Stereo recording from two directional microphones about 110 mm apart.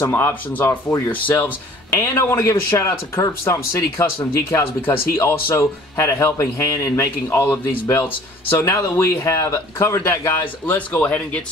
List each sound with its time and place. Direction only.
0.0 s speech: 20° left (ahead or behind)
10.7 s speech: 15° left (ahead or behind)